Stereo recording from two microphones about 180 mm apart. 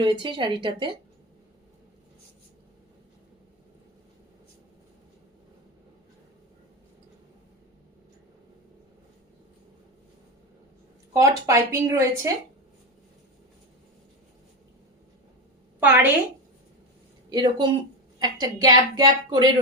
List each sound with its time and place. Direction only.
0.0 s a woman's voice: 25° right (ahead or behind)
11.1 s speech: 15° right (ahead or behind)
15.8 s speech: 10° right (ahead or behind)
17.2 s a woman's voice: 25° right (ahead or behind)